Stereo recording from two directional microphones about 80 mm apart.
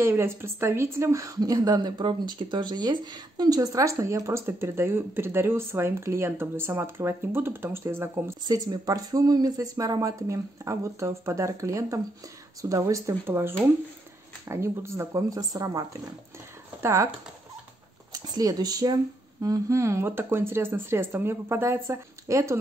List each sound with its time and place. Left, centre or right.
0.0 s a woman's voice: right
8.5 s a woman's voice: right
13.2 s a woman's voice: right
18.1 s speech: right
19.4 s a woman's voice: right